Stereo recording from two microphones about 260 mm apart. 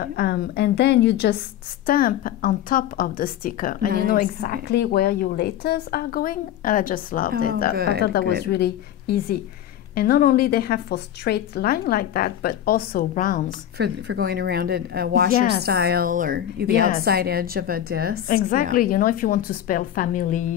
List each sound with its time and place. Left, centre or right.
0.0 s a woman's voice: left
7.7 s speech: right
8.0 s a woman's voice: left
13.7 s speech: right
18.3 s a woman's voice: left